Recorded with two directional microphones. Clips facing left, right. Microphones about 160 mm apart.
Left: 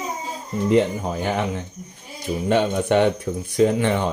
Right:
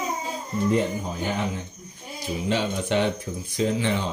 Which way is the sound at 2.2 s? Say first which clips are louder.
Left 6 dB; 55° left (ahead or behind).